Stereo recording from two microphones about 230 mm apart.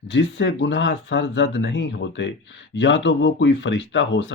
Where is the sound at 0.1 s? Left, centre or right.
Left.